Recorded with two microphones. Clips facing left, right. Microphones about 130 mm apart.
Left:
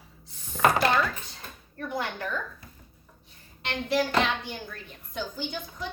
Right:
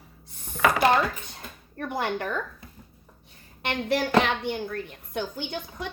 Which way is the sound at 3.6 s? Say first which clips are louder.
Right 1 dB; 60° right (ahead or behind).